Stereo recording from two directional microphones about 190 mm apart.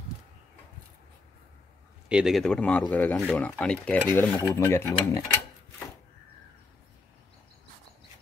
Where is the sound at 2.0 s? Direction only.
5° right (ahead or behind); by 5.2 s 10° left (ahead or behind).